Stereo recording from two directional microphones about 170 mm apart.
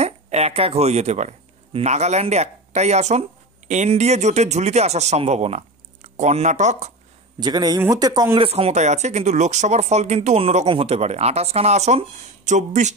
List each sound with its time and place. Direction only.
0.0 s speech: 40° right (ahead or behind)
7.3 s speech: 25° right (ahead or behind)
8.5 s speech: 35° right (ahead or behind)